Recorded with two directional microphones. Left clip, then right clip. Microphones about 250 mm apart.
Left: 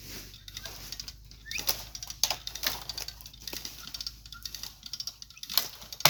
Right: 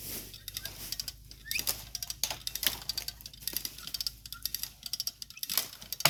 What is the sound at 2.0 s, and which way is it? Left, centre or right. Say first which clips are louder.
Typing: right 2 dB; right.